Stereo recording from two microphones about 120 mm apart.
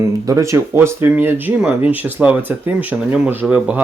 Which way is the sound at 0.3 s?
25° right (ahead or behind).